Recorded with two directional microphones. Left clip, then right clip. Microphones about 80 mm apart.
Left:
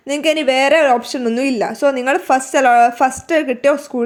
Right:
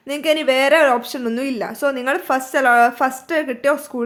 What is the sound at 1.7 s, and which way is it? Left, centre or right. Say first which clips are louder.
A woman's voice: left 3 dB; left.